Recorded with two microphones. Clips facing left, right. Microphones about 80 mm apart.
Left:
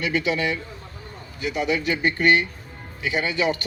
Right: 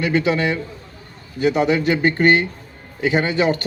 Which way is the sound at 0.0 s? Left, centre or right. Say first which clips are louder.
Right 5 dB; right.